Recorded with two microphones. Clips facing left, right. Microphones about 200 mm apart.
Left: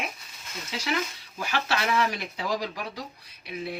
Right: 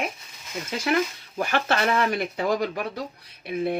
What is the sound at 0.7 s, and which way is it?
Speech, 55° right (ahead or behind).